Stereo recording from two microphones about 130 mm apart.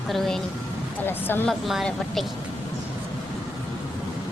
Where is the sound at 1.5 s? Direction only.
Centre (ahead or behind).